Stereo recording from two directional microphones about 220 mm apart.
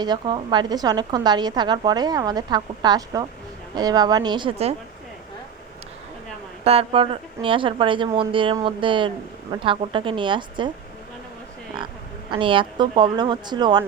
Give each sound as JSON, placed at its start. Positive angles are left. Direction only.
{"t": 0.0, "sound": "speech", "side_deg": -20}
{"t": 6.7, "sound": "speech", "side_deg": -25}
{"t": 12.3, "sound": "speech", "side_deg": -20}